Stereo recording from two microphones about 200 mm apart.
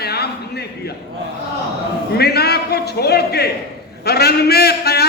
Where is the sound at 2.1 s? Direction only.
55° left (ahead or behind).